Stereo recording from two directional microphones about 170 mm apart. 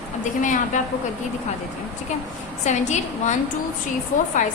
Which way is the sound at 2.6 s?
45° left (ahead or behind).